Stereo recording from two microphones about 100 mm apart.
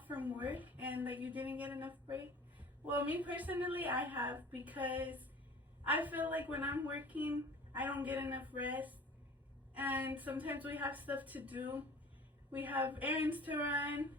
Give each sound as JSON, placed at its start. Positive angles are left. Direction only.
{"t": 0.0, "sound": "a woman's voice", "side_deg": -15}